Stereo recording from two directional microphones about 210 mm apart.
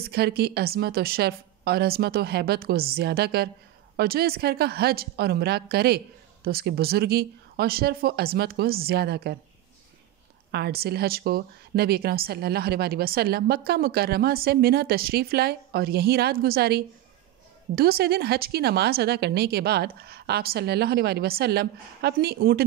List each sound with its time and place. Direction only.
0.0 s speech: 50° right (ahead or behind)
10.5 s speech: 50° right (ahead or behind)